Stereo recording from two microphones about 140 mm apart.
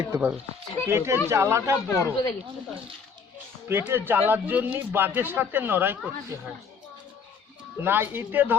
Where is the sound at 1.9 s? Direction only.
20° left (ahead or behind).